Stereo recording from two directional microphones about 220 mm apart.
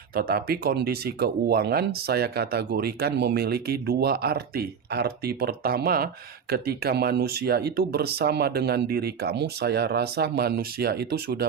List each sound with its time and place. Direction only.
0.1 s speech: 40° right (ahead or behind)